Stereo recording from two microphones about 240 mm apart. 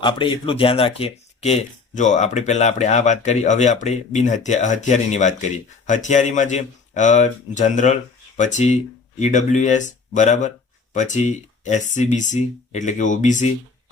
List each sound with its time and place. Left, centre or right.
0.0 s speech: left